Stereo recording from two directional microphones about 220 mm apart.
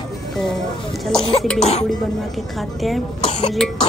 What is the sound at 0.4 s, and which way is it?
A man's voice, centre (ahead or behind).